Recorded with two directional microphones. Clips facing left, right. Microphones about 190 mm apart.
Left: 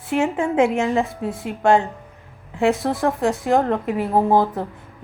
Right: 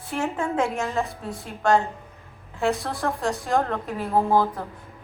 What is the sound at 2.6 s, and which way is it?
A woman's voice, 20° left (ahead or behind).